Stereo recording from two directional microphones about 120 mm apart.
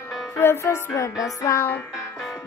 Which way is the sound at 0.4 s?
20° left (ahead or behind).